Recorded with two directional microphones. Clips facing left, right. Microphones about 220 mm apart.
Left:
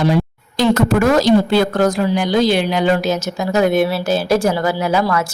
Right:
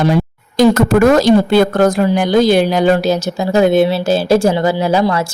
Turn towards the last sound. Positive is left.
turn(degrees=-30)  # may be behind; listen again after turning